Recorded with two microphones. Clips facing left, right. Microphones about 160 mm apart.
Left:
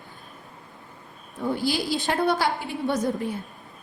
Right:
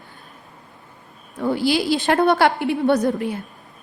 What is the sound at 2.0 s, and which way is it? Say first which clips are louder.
A woman's voice: right 7 dB; 65° right (ahead or behind).